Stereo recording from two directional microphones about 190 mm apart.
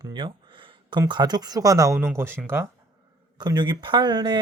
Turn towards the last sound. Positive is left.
turn(degrees=-25)  # may be behind; listen again after turning